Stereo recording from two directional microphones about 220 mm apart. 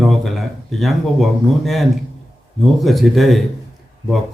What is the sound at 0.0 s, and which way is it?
Speech, centre (ahead or behind).